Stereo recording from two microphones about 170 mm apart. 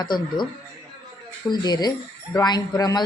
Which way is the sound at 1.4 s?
25° left (ahead or behind).